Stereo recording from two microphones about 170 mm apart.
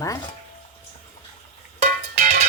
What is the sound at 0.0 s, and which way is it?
Speech, 20° left (ahead or behind).